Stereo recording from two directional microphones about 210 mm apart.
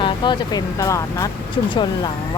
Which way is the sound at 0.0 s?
20° left (ahead or behind).